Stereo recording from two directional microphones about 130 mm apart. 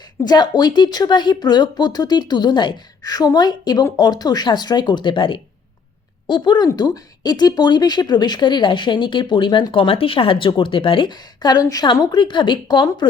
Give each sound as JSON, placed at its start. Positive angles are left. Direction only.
{"t": 0.3, "sound": "speech", "side_deg": 30}